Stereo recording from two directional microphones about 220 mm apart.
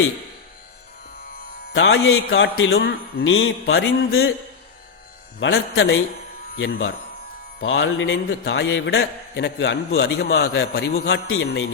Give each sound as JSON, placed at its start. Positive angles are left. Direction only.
{"t": 1.7, "sound": "a man's voice", "side_deg": 60}
{"t": 2.7, "sound": "speech", "side_deg": 45}
{"t": 3.3, "sound": "a man's voice", "side_deg": 65}
{"t": 5.4, "sound": "a man's voice", "side_deg": 65}
{"t": 11.3, "sound": "a man's voice", "side_deg": 60}